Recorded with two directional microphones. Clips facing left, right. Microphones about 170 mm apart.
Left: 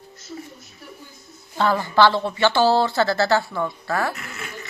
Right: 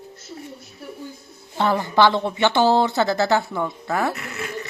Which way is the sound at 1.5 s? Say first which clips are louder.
Even; 20° right (ahead or behind).